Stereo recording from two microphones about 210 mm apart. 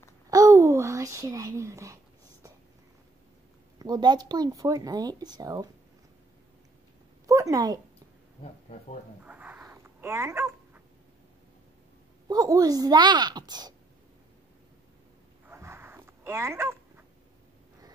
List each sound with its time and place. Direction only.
0.3 s speech: 15° right (ahead or behind)
3.8 s speech: 20° right (ahead or behind)
7.2 s speech: 15° right (ahead or behind)
9.2 s dog: 5° right (ahead or behind)
12.3 s speech: 15° right (ahead or behind)
15.5 s a sound: 10° right (ahead or behind)